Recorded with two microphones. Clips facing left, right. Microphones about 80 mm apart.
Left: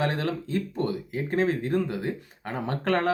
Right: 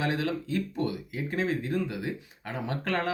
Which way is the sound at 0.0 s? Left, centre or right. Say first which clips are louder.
Left 2 dB; left.